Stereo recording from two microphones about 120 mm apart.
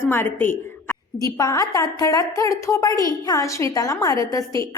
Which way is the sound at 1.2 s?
30° left (ahead or behind).